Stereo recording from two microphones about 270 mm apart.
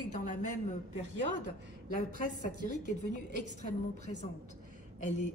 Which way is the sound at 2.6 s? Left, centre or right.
Left.